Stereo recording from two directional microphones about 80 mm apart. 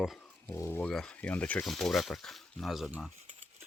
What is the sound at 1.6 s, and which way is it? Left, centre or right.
Speech, centre.